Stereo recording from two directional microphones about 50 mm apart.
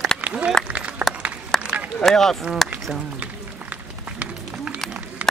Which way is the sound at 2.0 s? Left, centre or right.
Centre.